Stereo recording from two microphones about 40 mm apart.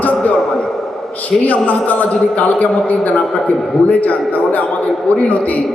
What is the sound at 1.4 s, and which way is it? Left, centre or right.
A man's voice, left.